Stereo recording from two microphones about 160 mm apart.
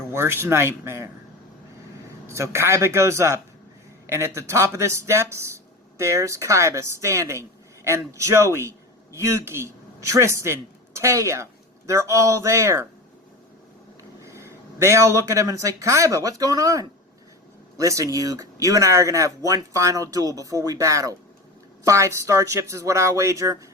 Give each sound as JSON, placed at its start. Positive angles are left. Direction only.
{"t": 0.1, "sound": "speech", "side_deg": -15}
{"t": 2.2, "sound": "speech", "side_deg": -15}
{"t": 14.2, "sound": "speech", "side_deg": -20}